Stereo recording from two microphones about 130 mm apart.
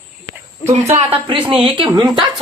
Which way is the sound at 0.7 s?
50° right (ahead or behind).